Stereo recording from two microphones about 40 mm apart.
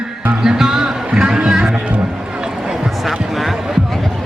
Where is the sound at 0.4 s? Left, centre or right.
Centre.